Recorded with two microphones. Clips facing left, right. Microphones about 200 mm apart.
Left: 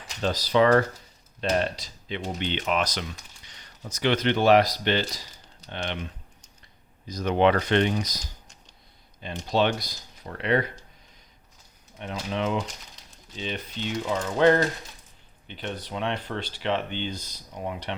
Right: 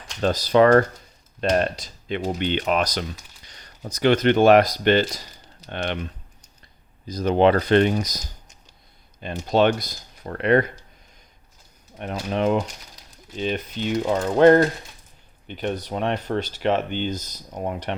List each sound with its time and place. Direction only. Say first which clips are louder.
0.2 s speech: right 5 dB; 50° right (ahead or behind)
7.1 s speech: right 4 dB; 30° right (ahead or behind)
9.5 s speech: right 5 dB; 50° right (ahead or behind)
11.9 s speech: right 5 dB; 50° right (ahead or behind)